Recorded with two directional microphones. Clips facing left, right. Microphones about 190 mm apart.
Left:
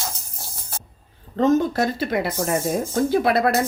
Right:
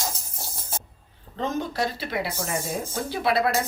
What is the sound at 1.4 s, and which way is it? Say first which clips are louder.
Speech: left 9 dB; 45° left (ahead or behind).